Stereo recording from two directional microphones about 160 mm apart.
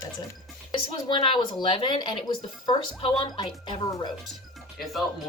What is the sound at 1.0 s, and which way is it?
Speech, 30° left (ahead or behind).